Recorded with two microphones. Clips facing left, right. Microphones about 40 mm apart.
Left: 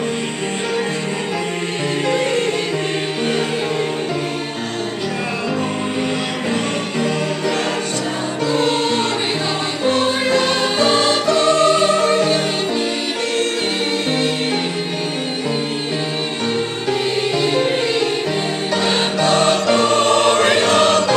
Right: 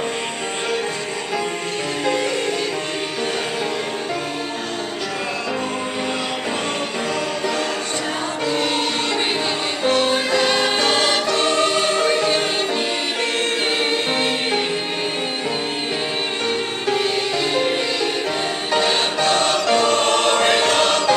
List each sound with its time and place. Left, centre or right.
10.3 s music: centre
14.1 s music: centre
17.4 s music: centre
19.2 s music: centre
19.5 s music: centre
20.0 s choir: centre